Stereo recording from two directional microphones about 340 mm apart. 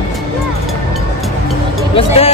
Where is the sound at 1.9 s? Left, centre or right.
Centre.